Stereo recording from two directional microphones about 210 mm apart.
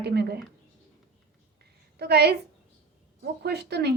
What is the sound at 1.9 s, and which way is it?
A woman's voice, 50° right (ahead or behind).